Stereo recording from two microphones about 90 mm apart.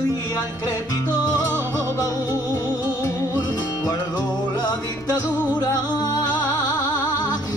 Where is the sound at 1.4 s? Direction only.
35° left (ahead or behind).